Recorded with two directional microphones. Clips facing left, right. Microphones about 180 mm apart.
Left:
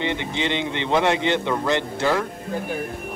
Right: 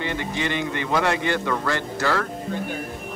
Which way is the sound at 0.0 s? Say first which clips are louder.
Left 2 dB; 20° left (ahead or behind).